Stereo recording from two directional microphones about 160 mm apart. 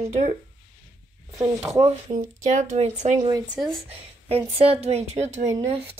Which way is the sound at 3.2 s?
25° right (ahead or behind).